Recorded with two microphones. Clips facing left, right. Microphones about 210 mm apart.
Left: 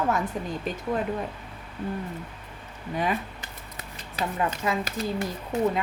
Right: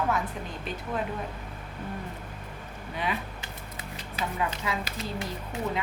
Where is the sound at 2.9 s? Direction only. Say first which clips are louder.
Left 5 dB; 45° left (ahead or behind).